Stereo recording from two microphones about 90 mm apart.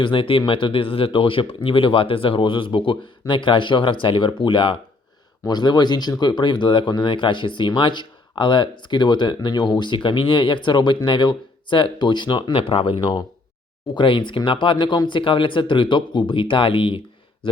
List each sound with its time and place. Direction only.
0.0 s speech: 70° left (ahead or behind)
5.5 s speech: 50° left (ahead or behind); by 17.6 s 75° left (ahead or behind)